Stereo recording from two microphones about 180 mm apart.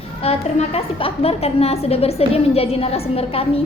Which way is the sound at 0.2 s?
35° left (ahead or behind).